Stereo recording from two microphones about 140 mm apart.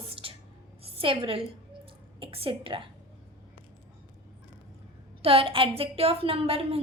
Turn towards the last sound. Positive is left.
turn(degrees=-45)  # may be behind; listen again after turning